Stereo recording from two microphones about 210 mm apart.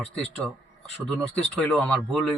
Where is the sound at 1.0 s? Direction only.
5° left (ahead or behind).